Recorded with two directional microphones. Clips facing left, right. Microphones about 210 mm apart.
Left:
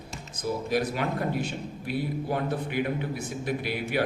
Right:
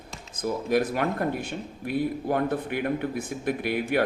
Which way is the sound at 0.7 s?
55° right (ahead or behind).